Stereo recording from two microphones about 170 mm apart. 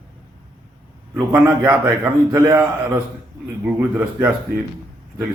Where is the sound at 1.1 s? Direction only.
15° right (ahead or behind).